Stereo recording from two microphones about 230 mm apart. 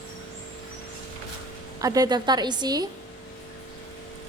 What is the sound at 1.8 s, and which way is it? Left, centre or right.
A woman's voice, centre.